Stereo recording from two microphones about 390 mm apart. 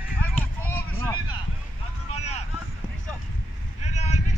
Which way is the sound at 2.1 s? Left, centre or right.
Centre.